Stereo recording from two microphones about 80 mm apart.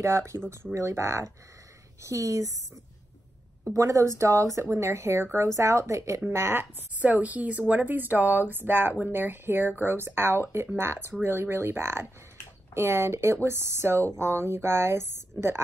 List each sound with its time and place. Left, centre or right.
0.0 s speech: right
3.7 s a woman's voice: right
7.0 s speech: centre